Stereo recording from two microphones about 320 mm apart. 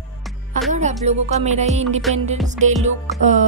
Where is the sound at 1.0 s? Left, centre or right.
Right.